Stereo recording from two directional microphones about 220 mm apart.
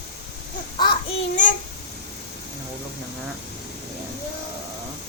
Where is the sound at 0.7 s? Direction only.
20° left (ahead or behind).